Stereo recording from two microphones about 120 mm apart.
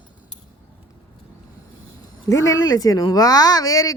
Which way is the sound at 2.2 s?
30° left (ahead or behind).